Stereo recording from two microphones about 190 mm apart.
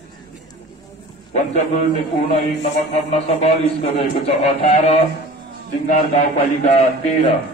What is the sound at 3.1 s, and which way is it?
A man's voice, 35° left (ahead or behind).